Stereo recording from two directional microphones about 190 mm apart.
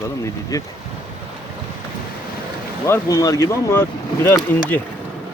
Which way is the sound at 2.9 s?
15° left (ahead or behind).